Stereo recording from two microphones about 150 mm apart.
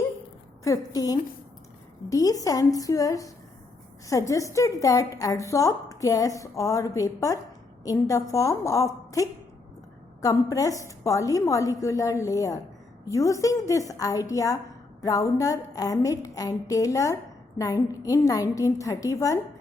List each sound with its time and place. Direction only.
0.6 s a woman's voice: 25° left (ahead or behind)